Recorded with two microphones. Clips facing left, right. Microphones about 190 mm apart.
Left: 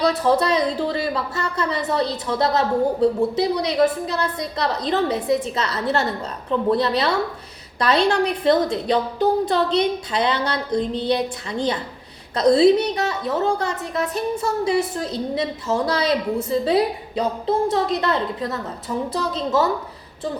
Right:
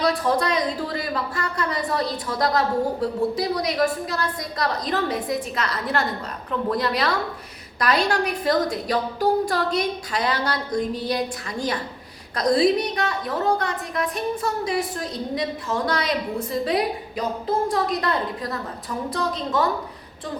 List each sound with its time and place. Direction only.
0.0 s a woman's voice: 25° left (ahead or behind)